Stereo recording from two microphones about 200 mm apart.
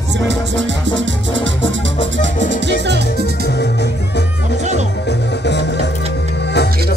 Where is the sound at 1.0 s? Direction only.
70° right (ahead or behind).